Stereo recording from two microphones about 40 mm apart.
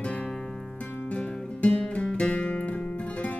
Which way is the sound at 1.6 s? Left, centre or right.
Left.